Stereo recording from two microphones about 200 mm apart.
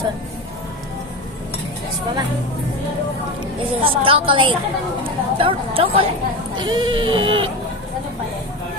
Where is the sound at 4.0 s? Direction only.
25° right (ahead or behind).